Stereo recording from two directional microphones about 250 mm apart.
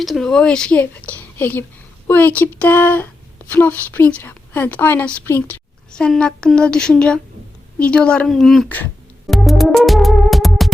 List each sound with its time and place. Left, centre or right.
0.0 s a woman's voice: centre
7.8 s music: centre